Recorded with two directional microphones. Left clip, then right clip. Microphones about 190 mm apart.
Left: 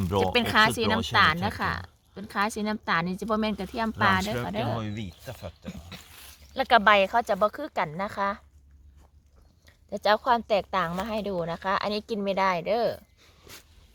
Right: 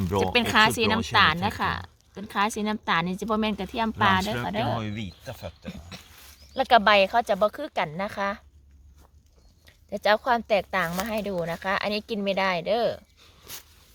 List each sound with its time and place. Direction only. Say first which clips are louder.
0.2 s speech: right 1 dB; 5° left (ahead or behind)
6.0 s dog: left 1 dB; 35° left (ahead or behind)
6.5 s speech: right 1 dB; 5° left (ahead or behind)
9.6 s speech: right 1 dB; 10° left (ahead or behind)